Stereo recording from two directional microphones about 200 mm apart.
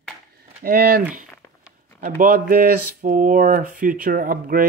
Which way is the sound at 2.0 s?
45° right (ahead or behind).